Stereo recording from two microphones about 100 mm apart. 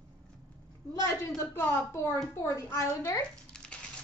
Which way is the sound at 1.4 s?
25° left (ahead or behind).